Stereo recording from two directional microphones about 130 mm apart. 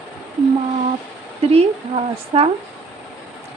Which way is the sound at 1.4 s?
50° right (ahead or behind).